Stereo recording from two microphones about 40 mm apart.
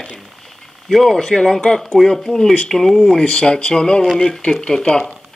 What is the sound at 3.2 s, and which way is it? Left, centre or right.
Speech, left.